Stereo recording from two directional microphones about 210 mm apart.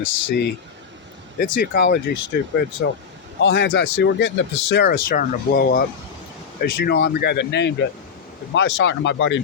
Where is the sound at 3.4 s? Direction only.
55° left (ahead or behind).